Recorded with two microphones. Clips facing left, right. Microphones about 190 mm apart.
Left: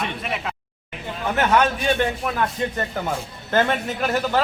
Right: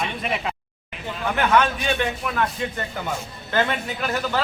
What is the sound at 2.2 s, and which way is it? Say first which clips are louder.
Speech: left 2 dB; 40° left (ahead or behind).